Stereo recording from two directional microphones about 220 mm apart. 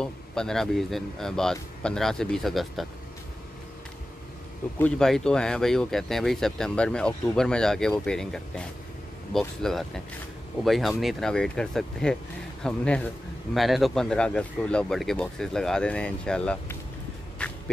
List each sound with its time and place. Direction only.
0.0 s a man's voice: 5° left (ahead or behind)
4.7 s a man's voice: 5° left (ahead or behind)
17.4 s a sound: 5° left (ahead or behind)